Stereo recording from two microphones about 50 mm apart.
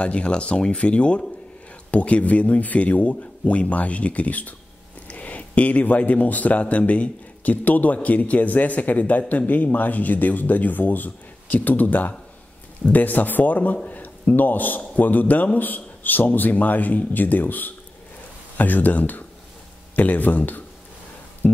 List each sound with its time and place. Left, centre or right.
0.0 s speech: left
13.8 s a sound: left
14.3 s speech: left